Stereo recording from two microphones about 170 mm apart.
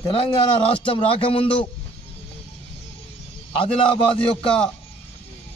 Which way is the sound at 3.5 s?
35° left (ahead or behind).